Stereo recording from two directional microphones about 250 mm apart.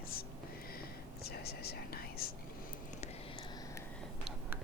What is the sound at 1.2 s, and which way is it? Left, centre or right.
Whispering, left.